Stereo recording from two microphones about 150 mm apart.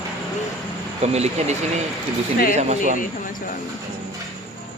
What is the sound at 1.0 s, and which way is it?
Speech, 45° right (ahead or behind).